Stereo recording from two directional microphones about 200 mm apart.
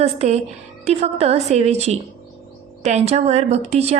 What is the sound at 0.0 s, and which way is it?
Speech, 35° right (ahead or behind).